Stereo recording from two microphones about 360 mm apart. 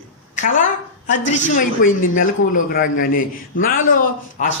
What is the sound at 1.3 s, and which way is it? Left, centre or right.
A man's voice, left.